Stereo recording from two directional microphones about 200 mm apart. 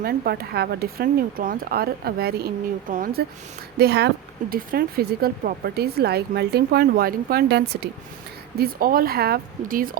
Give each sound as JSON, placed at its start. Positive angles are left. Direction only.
{"t": 0.0, "sound": "speech", "side_deg": -50}